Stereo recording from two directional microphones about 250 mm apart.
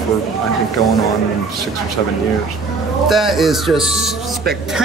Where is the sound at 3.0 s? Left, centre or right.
Centre.